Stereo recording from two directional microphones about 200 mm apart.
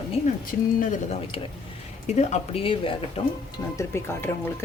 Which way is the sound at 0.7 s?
35° left (ahead or behind).